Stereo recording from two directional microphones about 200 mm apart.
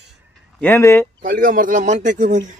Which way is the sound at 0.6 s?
10° left (ahead or behind).